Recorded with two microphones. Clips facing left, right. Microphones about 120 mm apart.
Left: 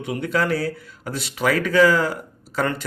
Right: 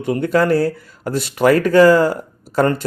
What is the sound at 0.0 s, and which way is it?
Speech, 45° right (ahead or behind).